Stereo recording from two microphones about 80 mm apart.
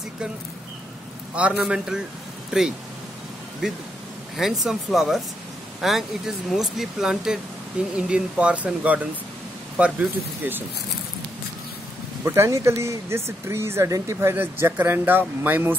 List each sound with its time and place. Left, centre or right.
1.3 s a man's voice: centre
4.4 s speech: centre
12.3 s speech: right
14.3 s speech: right